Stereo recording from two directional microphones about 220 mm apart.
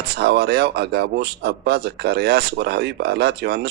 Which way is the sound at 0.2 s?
50° right (ahead or behind).